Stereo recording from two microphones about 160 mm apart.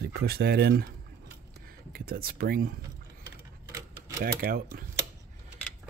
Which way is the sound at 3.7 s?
20° right (ahead or behind).